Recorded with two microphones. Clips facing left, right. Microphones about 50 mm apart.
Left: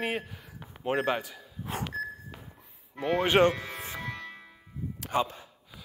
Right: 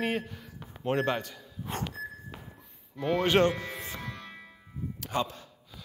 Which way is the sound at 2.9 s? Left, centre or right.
Left.